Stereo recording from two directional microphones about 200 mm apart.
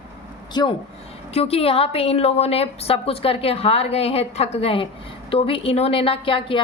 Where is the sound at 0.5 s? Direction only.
20° left (ahead or behind).